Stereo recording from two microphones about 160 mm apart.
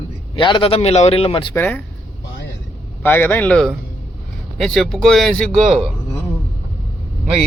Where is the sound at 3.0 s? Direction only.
10° left (ahead or behind).